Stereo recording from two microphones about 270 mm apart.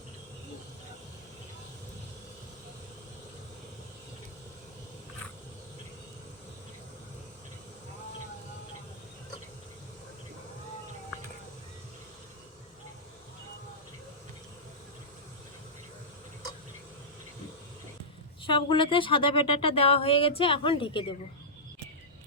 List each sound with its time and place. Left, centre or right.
18.4 s speech: centre